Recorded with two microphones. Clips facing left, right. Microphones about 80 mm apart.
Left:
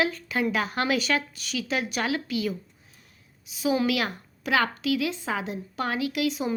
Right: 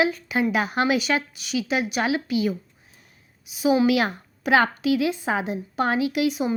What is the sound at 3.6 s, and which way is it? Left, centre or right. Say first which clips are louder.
A woman's voice: right 5 dB; centre.